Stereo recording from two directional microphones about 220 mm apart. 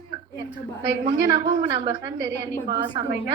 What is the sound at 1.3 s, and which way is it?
A woman's voice, 15° right (ahead or behind).